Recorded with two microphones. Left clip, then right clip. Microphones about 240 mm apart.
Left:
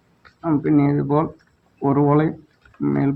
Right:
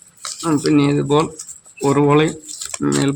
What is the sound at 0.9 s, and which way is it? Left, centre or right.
Speech, right.